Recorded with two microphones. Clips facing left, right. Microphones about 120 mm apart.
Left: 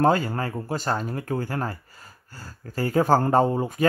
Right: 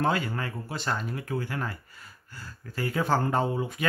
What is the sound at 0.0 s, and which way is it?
Speech, 40° left (ahead or behind).